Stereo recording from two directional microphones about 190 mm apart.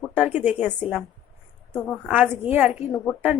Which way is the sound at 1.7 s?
5° left (ahead or behind).